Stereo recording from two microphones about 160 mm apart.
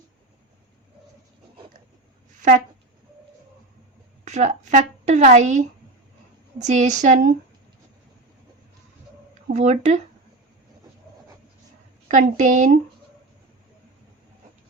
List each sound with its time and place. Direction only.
4.3 s a woman's voice: 45° right (ahead or behind)
6.7 s a woman's voice: 50° right (ahead or behind)
9.5 s a woman's voice: 45° right (ahead or behind)
12.0 s a woman's voice: 50° right (ahead or behind)